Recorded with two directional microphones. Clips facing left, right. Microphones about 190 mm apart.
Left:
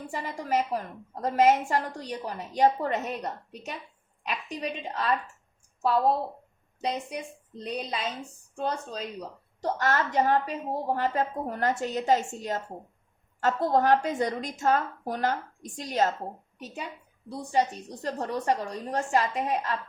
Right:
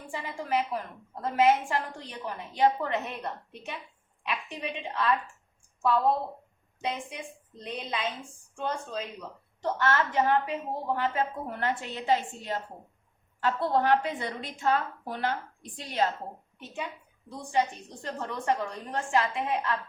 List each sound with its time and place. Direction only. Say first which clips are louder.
0.0 s a woman's voice: left 2 dB; 40° left (ahead or behind)
6.8 s a woman's voice: left 3 dB; 40° left (ahead or behind)
17.2 s a woman's voice: left 2 dB; 40° left (ahead or behind)